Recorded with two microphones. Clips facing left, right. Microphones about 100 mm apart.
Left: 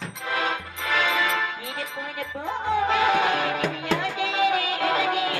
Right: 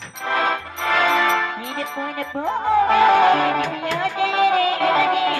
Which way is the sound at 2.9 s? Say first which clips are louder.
Right 9 dB; 40° right (ahead or behind).